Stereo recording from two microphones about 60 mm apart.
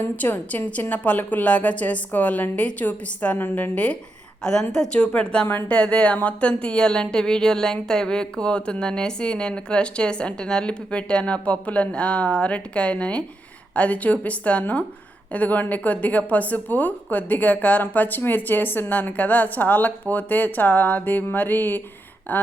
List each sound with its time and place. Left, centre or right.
0.0 s a woman's voice: left